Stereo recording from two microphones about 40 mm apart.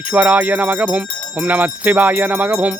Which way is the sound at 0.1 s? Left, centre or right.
Right.